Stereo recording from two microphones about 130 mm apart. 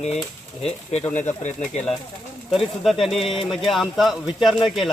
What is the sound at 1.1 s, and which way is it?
Speech, 65° left (ahead or behind).